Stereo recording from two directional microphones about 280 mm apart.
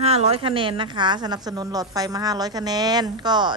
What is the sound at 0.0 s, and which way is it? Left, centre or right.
A woman's voice, right.